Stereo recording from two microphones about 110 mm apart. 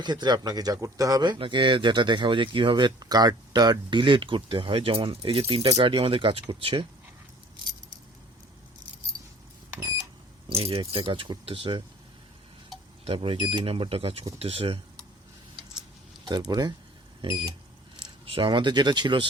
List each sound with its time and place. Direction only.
0.0 s speech: 40° right (ahead or behind)
10.5 s speech: 60° right (ahead or behind)
13.1 s speech: 50° right (ahead or behind)
13.7 s speech: 55° right (ahead or behind)
16.2 s speech: 40° right (ahead or behind)
18.3 s speech: 50° right (ahead or behind)